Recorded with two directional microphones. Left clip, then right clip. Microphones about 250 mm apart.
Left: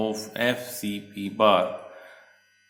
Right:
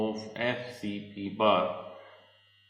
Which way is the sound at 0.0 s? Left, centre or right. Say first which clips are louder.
Left 6 dB; left.